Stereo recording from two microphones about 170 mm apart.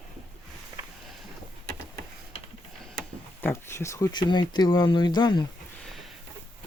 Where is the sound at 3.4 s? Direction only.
15° left (ahead or behind).